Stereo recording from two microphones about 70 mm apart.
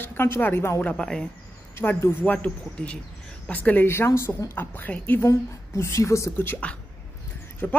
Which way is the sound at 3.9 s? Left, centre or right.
Left.